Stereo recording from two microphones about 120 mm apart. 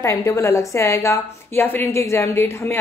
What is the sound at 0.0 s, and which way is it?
A woman's voice, 25° left (ahead or behind).